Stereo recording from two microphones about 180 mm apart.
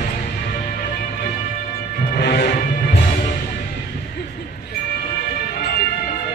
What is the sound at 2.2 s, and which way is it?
Music, 65° left (ahead or behind).